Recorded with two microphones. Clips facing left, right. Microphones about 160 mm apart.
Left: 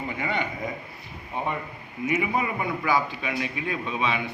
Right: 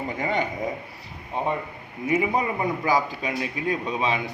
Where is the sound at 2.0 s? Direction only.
35° right (ahead or behind).